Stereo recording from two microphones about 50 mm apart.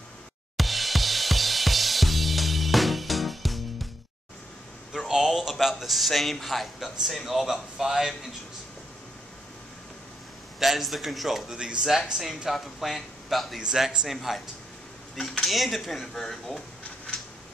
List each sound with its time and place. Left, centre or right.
0.6 s music: centre
4.9 s a sound: centre
6.4 s speech: centre
10.6 s speech: centre
11.5 s speech: centre
15.4 s speech: centre